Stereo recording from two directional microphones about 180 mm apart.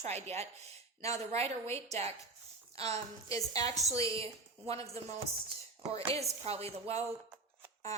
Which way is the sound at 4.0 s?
35° right (ahead or behind).